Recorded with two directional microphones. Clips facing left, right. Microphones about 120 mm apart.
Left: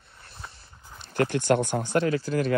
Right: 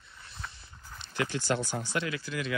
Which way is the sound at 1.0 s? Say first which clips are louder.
Left 7 dB; 50° left (ahead or behind).